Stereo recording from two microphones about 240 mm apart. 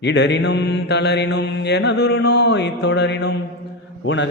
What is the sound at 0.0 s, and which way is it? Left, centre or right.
Mantra, left.